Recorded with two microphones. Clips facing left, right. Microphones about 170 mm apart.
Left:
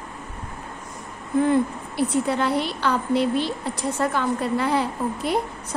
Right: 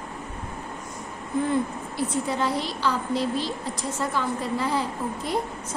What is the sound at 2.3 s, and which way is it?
A woman's voice, 60° left (ahead or behind).